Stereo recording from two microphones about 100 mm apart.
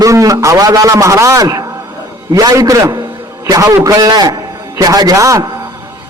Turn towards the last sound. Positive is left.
turn(degrees=-40)  # may be behind; listen again after turning